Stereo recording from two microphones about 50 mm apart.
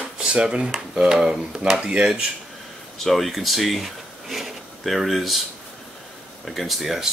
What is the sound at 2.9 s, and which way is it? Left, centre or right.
Speech, centre.